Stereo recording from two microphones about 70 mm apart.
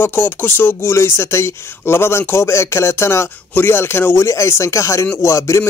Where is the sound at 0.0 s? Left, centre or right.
Left.